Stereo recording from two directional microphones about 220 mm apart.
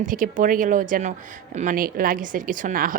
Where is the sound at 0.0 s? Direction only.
35° right (ahead or behind).